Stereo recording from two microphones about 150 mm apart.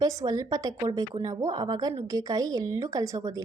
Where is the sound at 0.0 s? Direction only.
20° right (ahead or behind).